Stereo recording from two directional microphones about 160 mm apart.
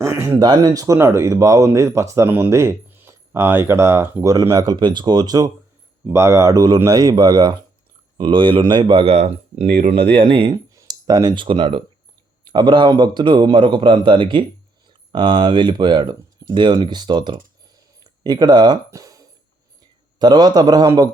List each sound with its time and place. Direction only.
0.0 s a sound: 15° right (ahead or behind)
0.4 s speech: 25° right (ahead or behind)
10.8 s clicking: 25° right (ahead or behind)
12.5 s speech: 30° right (ahead or behind)
18.0 s a sound: 25° right (ahead or behind)
20.1 s speech: 25° right (ahead or behind)